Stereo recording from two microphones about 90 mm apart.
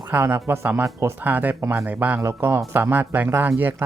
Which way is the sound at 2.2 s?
25° right (ahead or behind).